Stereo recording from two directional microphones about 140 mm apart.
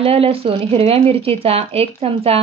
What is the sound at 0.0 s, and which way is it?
Speech, 45° right (ahead or behind).